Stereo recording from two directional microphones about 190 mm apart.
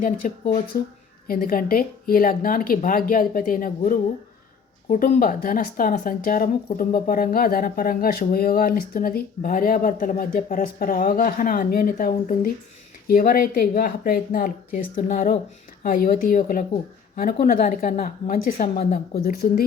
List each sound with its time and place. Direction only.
0.0 s speech: 45° left (ahead or behind)